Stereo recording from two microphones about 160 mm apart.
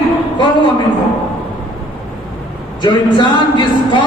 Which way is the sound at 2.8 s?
30° left (ahead or behind).